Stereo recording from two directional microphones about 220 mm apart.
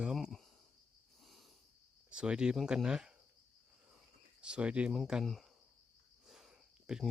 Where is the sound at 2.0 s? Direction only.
5° right (ahead or behind).